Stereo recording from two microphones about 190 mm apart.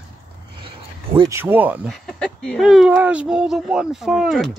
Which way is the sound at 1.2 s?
15° right (ahead or behind).